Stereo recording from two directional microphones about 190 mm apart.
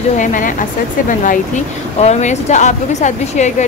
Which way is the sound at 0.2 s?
45° left (ahead or behind).